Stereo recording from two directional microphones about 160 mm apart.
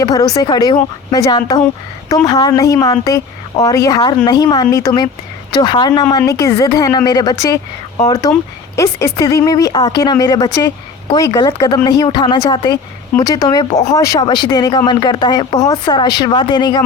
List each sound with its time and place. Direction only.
0.0 s speech: 20° left (ahead or behind)